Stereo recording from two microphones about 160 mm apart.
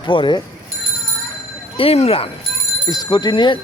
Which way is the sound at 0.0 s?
30° left (ahead or behind).